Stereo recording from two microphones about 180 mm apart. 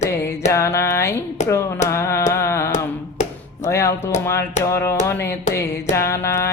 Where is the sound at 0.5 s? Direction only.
15° left (ahead or behind).